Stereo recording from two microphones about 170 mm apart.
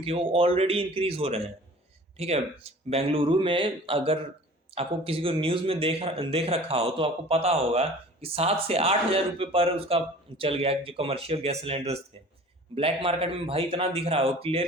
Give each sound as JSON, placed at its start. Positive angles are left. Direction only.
{"t": 0.0, "sound": "speech", "side_deg": -35}